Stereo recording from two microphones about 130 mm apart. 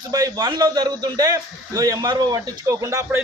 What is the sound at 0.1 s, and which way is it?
A man's voice, 30° right (ahead or behind).